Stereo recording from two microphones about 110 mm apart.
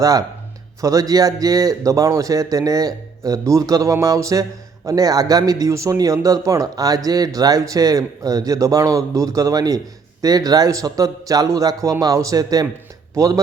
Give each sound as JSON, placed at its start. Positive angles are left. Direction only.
{"t": 0.0, "sound": "a man's voice", "side_deg": -30}